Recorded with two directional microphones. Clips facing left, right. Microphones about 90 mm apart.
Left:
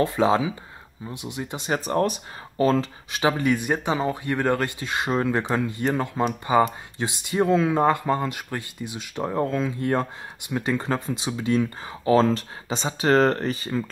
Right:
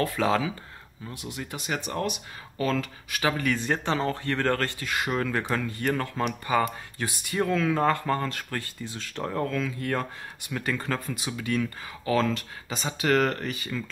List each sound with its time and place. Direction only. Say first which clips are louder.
0.0 s speech: left 4 dB; 20° left (ahead or behind)
1.7 s speech: left 7 dB; 35° left (ahead or behind)